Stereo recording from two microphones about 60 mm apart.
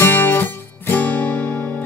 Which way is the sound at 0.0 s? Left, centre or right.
Left.